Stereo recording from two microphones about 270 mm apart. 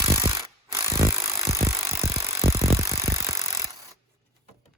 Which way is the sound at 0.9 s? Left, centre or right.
Centre.